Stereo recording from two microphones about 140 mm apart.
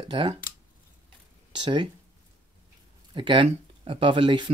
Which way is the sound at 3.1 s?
35° right (ahead or behind).